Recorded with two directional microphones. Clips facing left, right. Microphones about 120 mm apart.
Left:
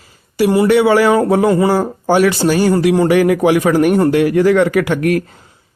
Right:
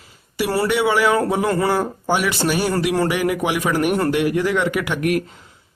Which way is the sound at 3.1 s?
40° left (ahead or behind).